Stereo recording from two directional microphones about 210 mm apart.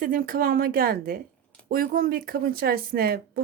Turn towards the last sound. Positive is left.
turn(degrees=-45)  # may be behind; listen again after turning